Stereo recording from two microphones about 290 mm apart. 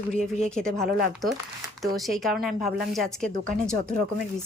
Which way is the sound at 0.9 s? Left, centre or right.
Right.